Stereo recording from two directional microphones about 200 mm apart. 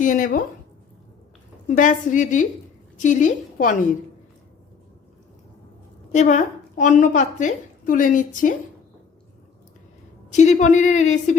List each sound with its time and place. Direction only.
0.0 s a woman's voice: 40° left (ahead or behind)
1.6 s a woman's voice: 40° left (ahead or behind)
6.1 s a woman's voice: 35° left (ahead or behind)
10.3 s a woman's voice: 35° left (ahead or behind)